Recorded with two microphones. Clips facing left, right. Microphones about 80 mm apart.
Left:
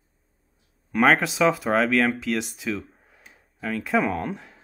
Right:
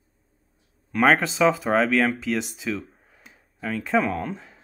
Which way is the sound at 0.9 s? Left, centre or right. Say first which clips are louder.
Even; centre.